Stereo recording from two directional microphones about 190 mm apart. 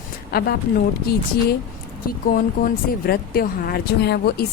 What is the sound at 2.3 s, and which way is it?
Speech, 50° left (ahead or behind).